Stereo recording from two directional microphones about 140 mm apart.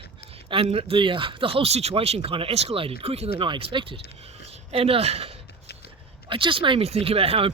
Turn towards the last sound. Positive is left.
turn(degrees=-45)  # may be behind; listen again after turning